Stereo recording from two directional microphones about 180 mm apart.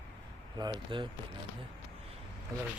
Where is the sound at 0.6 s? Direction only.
20° right (ahead or behind).